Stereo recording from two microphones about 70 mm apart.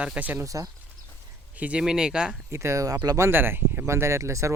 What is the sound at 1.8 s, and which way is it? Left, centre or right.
Speech, centre.